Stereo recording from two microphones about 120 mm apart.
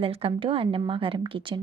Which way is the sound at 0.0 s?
55° right (ahead or behind).